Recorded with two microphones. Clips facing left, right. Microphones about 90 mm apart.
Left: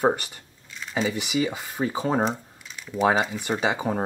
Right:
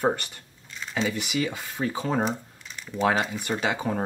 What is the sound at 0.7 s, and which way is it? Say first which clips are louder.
Speech: left 1 dB; 5° left (ahead or behind).